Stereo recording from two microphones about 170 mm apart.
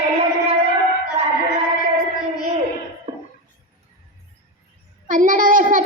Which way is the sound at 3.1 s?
30° right (ahead or behind).